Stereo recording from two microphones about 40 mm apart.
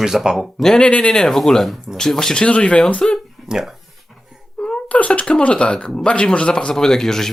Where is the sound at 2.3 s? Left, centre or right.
Left.